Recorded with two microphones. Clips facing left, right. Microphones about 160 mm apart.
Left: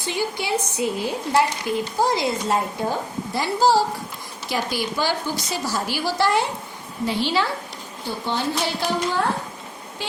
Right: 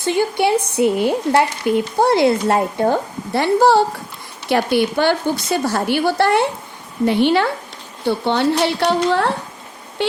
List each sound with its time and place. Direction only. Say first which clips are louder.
0.0 s a woman's voice: right 9 dB; 55° right (ahead or behind)